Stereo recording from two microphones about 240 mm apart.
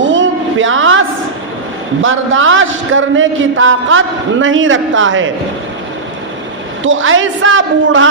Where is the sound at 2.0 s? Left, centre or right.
Right.